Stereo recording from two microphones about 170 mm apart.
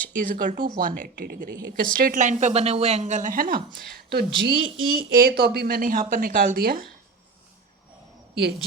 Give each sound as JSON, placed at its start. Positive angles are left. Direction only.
{"t": 0.2, "sound": "a woman's voice", "side_deg": -50}
{"t": 3.9, "sound": "speech", "side_deg": -65}